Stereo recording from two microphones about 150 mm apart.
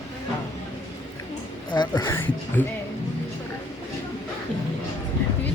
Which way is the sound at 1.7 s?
30° left (ahead or behind).